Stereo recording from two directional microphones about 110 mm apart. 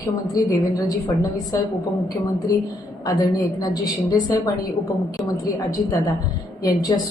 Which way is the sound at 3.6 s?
35° left (ahead or behind).